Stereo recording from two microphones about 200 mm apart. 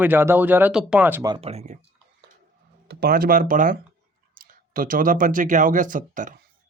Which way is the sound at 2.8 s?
50° right (ahead or behind).